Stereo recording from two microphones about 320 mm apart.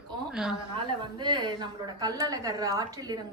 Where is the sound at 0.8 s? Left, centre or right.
Centre.